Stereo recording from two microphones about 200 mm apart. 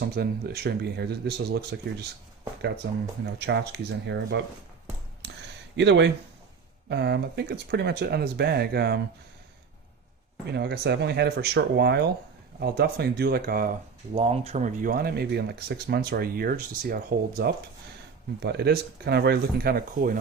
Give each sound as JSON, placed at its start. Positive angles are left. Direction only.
{"t": 0.0, "sound": "speech", "side_deg": -50}
{"t": 5.2, "sound": "a sound", "side_deg": -60}
{"t": 5.7, "sound": "speech", "side_deg": -60}
{"t": 10.5, "sound": "speech", "side_deg": -55}
{"t": 14.1, "sound": "speech", "side_deg": -30}